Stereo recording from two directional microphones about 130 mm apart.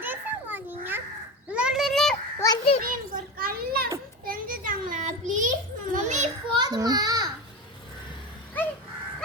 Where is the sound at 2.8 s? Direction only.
90° right.